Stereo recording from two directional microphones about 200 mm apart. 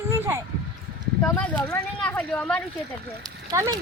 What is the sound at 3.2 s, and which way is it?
Speech, 15° right (ahead or behind).